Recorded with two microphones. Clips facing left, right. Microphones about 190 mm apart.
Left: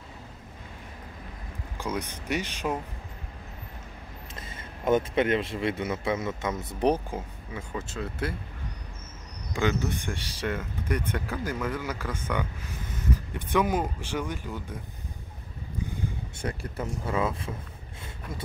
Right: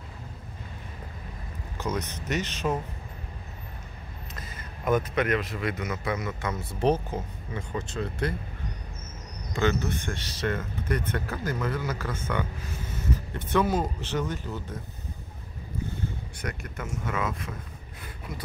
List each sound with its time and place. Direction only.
1.8 s speech: 10° left (ahead or behind)
4.4 s a man's voice: 25° left (ahead or behind); by 8.4 s 5° left (ahead or behind)
9.5 s speech: 10° left (ahead or behind)
13.5 s speech: 15° left (ahead or behind)
16.3 s speech: 30° left (ahead or behind)